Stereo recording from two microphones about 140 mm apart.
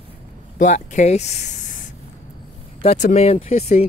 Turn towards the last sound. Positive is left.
turn(degrees=50)  # may be behind; listen again after turning